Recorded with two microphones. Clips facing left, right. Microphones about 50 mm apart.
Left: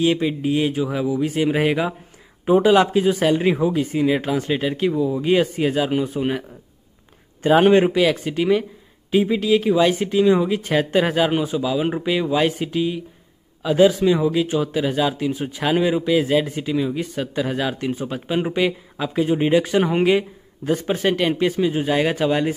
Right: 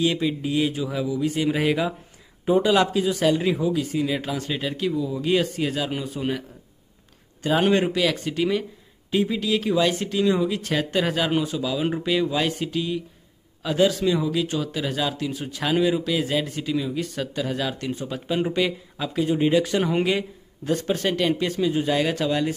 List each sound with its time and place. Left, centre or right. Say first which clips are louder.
0.0 s speech: left 4 dB; centre
7.4 s speech: left 6 dB; left